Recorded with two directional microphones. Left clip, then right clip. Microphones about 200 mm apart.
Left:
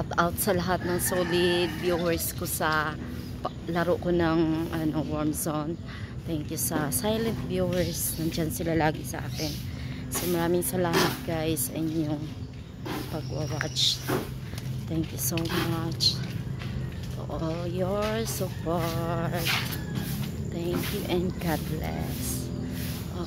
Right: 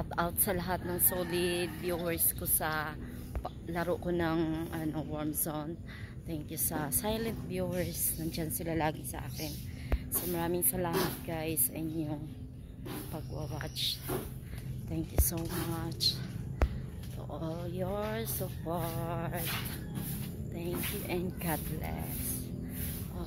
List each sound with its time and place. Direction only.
0.1 s a woman's voice: 5° left (ahead or behind)
10.3 s a woman's voice: 5° left (ahead or behind)
15.3 s a woman's voice: centre (ahead or behind)
17.3 s a woman's voice: 5° left (ahead or behind)